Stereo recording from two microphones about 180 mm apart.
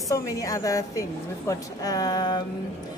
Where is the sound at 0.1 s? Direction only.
20° left (ahead or behind).